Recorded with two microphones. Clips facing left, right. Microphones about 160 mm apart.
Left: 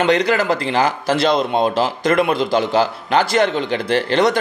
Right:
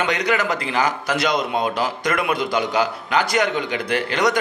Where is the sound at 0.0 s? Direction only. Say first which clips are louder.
Left 5 dB; 30° left (ahead or behind).